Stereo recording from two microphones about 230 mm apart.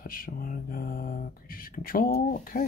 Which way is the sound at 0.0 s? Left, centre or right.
Left.